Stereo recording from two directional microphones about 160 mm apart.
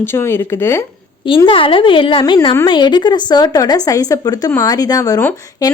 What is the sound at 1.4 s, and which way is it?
A woman's voice, 35° left (ahead or behind).